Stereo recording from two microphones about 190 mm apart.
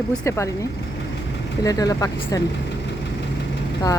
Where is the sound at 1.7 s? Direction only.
20° left (ahead or behind).